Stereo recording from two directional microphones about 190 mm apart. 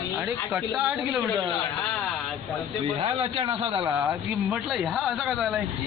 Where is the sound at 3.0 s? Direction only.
30° right (ahead or behind).